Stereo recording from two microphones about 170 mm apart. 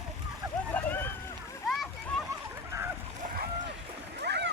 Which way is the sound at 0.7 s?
10° left (ahead or behind).